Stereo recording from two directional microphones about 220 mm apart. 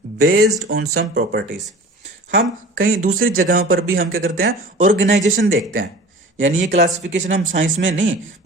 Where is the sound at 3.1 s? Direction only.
70° right (ahead or behind).